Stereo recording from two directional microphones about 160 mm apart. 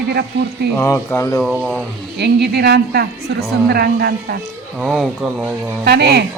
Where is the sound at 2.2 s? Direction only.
90° right; by 4.4 s 75° right (ahead or behind).